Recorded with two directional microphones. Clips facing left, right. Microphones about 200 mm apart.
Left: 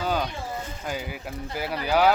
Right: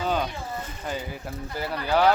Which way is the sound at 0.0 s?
5° left (ahead or behind).